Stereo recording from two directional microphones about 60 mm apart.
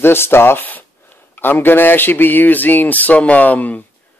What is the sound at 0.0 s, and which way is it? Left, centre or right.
Speech, left.